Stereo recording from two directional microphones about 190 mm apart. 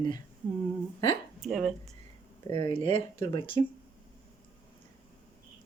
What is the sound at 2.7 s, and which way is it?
Speech, 30° left (ahead or behind).